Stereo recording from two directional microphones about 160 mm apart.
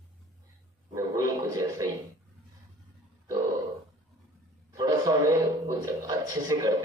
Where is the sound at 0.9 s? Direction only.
20° right (ahead or behind).